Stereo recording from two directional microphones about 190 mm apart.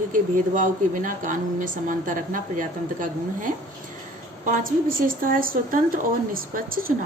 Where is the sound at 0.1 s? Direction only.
45° right (ahead or behind).